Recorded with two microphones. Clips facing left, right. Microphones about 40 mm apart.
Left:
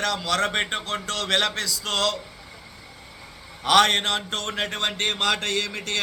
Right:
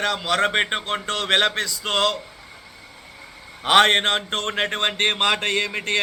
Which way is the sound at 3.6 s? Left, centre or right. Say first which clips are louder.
Right 3 dB; right.